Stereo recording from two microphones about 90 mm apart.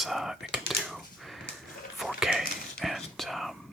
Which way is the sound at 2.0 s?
5° right (ahead or behind).